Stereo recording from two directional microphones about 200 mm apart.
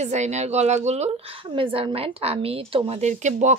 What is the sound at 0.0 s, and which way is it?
A woman's voice, 35° right (ahead or behind).